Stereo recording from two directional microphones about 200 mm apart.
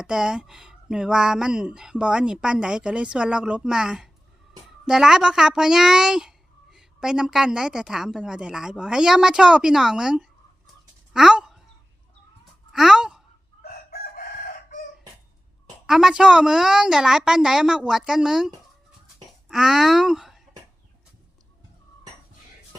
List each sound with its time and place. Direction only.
0.0 s a child's voice: 5° right (ahead or behind)
11.1 s a sound: 5° right (ahead or behind)
12.7 s sigh: centre (ahead or behind)
13.9 s chicken: 50° left (ahead or behind)
15.9 s a child's voice: centre (ahead or behind)